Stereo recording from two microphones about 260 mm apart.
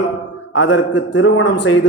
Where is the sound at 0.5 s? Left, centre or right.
Left.